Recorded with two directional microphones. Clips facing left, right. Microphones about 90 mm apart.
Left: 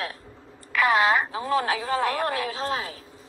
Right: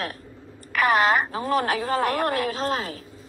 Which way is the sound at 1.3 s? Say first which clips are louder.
Right 1 dB; 50° right (ahead or behind).